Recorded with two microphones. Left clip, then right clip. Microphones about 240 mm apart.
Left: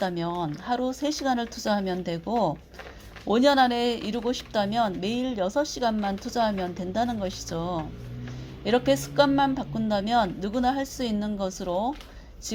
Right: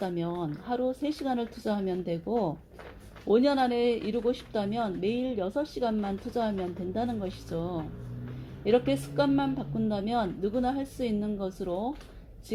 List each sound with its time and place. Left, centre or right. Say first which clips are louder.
0.0 s speech: left 4 dB; left